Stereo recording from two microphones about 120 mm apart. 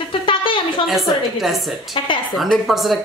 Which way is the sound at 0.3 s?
45° left (ahead or behind).